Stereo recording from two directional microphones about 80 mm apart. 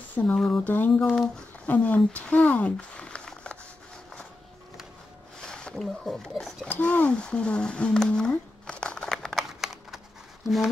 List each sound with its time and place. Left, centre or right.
0.4 s speech: centre
0.7 s speech: left
5.4 s speech: centre
6.7 s a sound: left; by 9.9 s centre
10.4 s speech: centre